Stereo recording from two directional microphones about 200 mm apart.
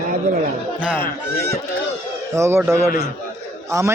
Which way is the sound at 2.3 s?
15° right (ahead or behind).